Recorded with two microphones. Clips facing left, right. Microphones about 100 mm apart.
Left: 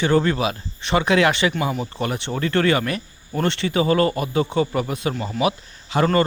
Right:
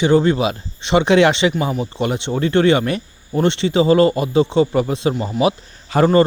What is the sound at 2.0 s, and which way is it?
Speech, 25° right (ahead or behind).